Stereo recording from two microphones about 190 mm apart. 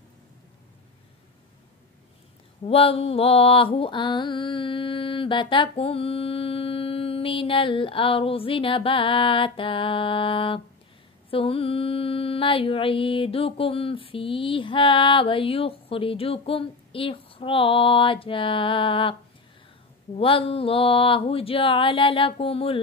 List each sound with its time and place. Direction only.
2.6 s mantra: 30° left (ahead or behind)
20.2 s mantra: 30° left (ahead or behind)